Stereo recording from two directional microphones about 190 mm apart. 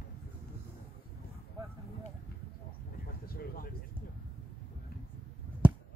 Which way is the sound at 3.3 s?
50° left (ahead or behind).